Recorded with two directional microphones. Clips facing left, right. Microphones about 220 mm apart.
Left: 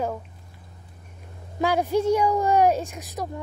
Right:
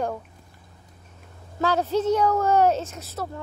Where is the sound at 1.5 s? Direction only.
15° left (ahead or behind).